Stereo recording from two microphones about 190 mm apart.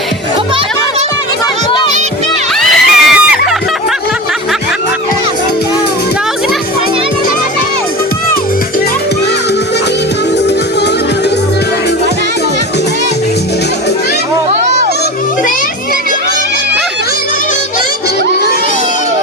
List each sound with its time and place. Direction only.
2.6 s screaming: centre (ahead or behind)